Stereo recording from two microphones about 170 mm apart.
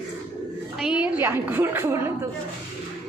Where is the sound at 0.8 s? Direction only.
5° right (ahead or behind).